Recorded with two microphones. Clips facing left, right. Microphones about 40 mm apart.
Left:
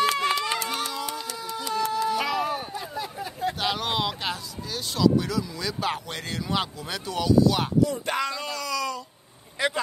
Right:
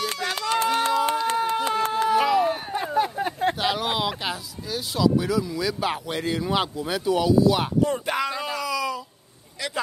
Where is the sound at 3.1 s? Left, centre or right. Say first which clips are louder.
Right 5 dB; right.